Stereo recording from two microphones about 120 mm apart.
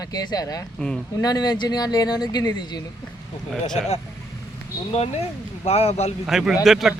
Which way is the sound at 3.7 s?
60° left (ahead or behind).